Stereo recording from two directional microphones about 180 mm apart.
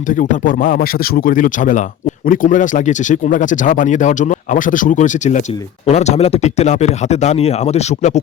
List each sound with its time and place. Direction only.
0.1 s speech: 50° left (ahead or behind)